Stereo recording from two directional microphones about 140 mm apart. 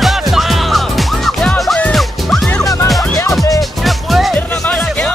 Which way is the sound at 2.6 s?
25° left (ahead or behind).